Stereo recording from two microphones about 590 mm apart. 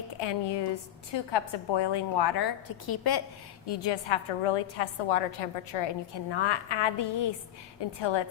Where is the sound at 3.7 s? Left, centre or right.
Left.